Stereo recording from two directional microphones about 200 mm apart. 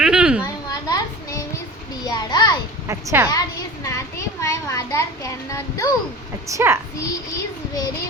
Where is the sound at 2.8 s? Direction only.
15° right (ahead or behind).